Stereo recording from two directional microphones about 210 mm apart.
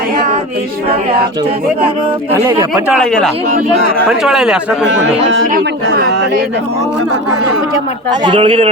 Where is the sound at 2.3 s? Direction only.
15° right (ahead or behind).